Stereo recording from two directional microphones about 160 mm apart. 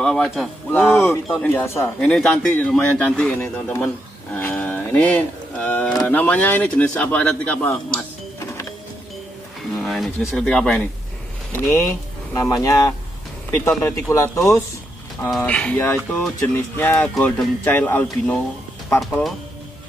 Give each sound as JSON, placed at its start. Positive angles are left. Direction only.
{"t": 0.0, "sound": "a man's voice", "side_deg": 5}
{"t": 2.0, "sound": "a man's voice", "side_deg": 5}
{"t": 9.8, "sound": "speech", "side_deg": 0}
{"t": 12.4, "sound": "speech", "side_deg": 20}
{"t": 15.2, "sound": "a man's voice", "side_deg": 5}